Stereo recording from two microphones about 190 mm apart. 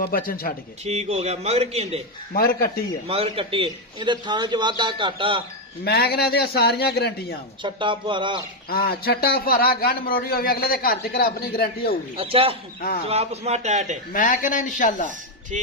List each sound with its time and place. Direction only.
0.0 s a man's voice: 50° left (ahead or behind)
0.9 s a man's voice: 35° right (ahead or behind)
2.3 s a man's voice: 50° left (ahead or behind)
3.1 s a man's voice: 30° right (ahead or behind)
5.8 s a man's voice: 55° left (ahead or behind)
7.6 s a man's voice: 25° right (ahead or behind)
8.7 s a man's voice: 55° left (ahead or behind)
12.1 s a man's voice: 30° right (ahead or behind)
14.1 s a man's voice: 45° left (ahead or behind)